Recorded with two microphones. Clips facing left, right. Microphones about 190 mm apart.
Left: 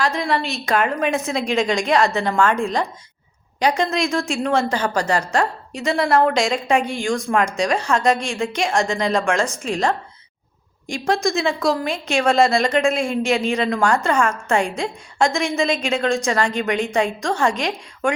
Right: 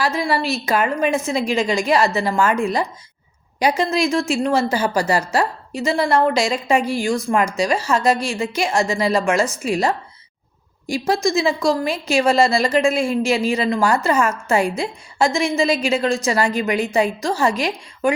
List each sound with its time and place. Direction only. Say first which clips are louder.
0.0 s speech: right 1 dB; 5° right (ahead or behind)